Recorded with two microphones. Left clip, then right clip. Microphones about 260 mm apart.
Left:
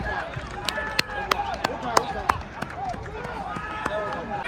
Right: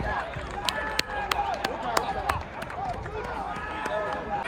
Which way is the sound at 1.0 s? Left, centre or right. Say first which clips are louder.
Left 3 dB; centre.